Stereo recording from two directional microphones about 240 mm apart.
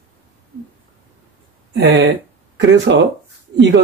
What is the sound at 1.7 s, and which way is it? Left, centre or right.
Speech, right.